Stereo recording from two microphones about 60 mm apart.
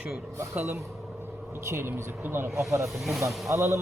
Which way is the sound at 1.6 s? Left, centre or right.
Right.